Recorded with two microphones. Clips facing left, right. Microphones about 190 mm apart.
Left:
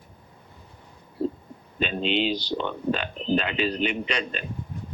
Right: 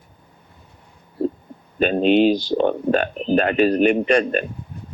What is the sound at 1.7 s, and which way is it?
Speech, 55° right (ahead or behind).